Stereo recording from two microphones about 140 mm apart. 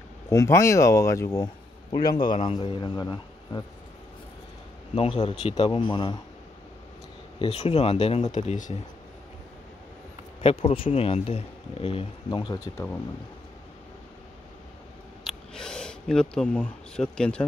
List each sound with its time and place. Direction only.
0.3 s speech: 20° left (ahead or behind)
4.9 s speech: 45° left (ahead or behind)
5.6 s speech: 35° left (ahead or behind)
7.3 s speech: 45° left (ahead or behind)
10.4 s speech: 40° left (ahead or behind)
12.3 s speech: 30° left (ahead or behind)
15.2 s speech: 5° left (ahead or behind)